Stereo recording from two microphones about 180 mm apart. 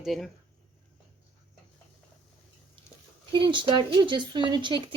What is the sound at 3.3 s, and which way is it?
Speech, 25° right (ahead or behind).